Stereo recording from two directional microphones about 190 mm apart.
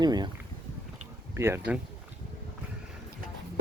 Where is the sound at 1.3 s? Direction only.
10° right (ahead or behind).